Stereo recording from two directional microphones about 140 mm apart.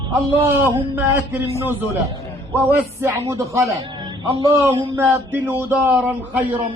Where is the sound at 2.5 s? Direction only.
15° right (ahead or behind).